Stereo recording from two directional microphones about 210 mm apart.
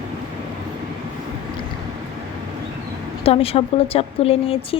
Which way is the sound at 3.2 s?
25° left (ahead or behind).